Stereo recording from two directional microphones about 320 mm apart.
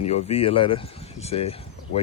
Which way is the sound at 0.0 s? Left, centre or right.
Centre.